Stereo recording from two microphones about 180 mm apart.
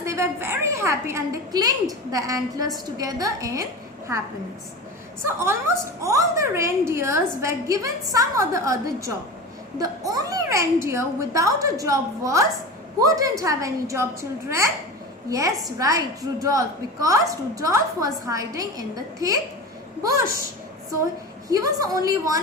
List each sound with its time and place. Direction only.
0.0 s a woman's voice: 15° right (ahead or behind)
5.2 s a woman's voice: 15° right (ahead or behind)
21.5 s a woman's voice: 20° right (ahead or behind)